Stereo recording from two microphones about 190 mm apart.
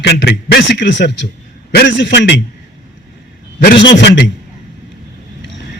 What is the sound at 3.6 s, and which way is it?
Speech, 65° left (ahead or behind).